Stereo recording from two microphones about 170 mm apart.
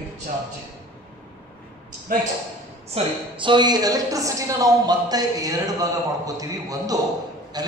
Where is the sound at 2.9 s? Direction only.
30° right (ahead or behind).